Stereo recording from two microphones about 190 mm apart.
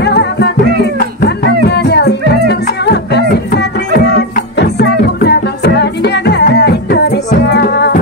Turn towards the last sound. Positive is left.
turn(degrees=60)  # may be behind; listen again after turning